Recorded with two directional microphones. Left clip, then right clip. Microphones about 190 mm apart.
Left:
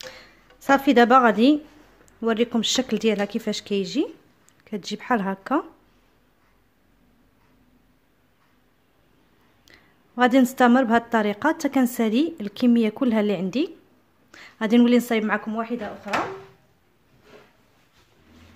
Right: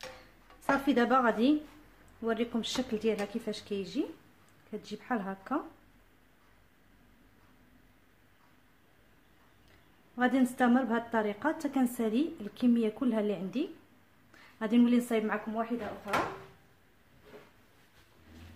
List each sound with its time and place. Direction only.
0.7 s a woman's voice: 55° left (ahead or behind)
9.7 s a woman's voice: 55° left (ahead or behind)